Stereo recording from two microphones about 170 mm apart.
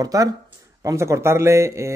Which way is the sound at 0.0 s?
20° right (ahead or behind).